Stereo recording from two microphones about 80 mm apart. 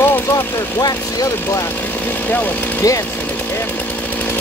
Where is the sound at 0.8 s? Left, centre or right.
Left.